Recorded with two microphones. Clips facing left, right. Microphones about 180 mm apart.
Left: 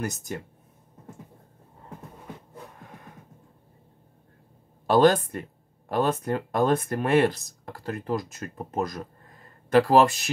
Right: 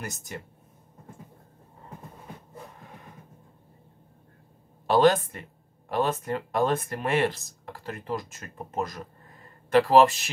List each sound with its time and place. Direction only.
4.8 s speech: 45° left (ahead or behind)